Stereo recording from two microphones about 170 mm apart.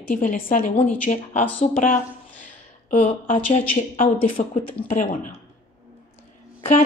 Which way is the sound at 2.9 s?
40° left (ahead or behind).